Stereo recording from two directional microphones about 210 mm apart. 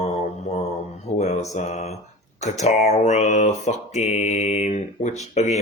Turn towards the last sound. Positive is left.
turn(degrees=30)  # may be behind; listen again after turning